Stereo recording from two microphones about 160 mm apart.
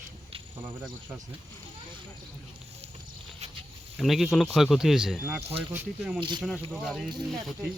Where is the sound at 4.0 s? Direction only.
Centre (ahead or behind).